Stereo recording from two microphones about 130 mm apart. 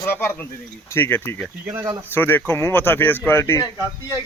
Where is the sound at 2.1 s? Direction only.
15° left (ahead or behind).